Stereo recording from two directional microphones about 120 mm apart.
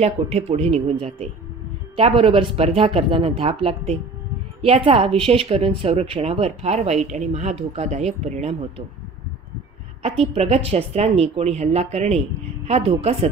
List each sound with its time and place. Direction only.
0.0 s speech: 60° right (ahead or behind)
10.0 s speech: 55° right (ahead or behind)